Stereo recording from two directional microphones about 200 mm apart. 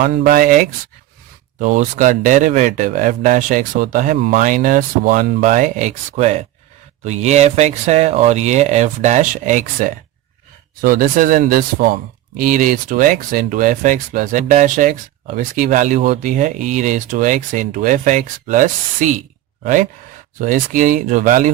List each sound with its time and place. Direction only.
0.0 s speech: 45° right (ahead or behind)
20.4 s speech: 40° right (ahead or behind)